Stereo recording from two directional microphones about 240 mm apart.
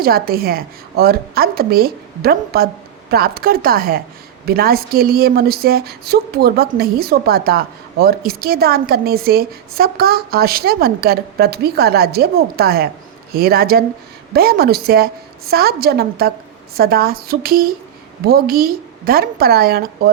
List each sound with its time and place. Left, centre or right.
0.0 s speech: right